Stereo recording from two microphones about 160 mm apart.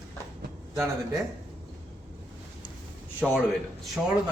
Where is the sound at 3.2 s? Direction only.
5° right (ahead or behind).